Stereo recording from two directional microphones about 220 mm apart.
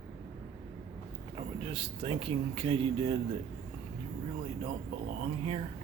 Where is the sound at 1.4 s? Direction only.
25° right (ahead or behind).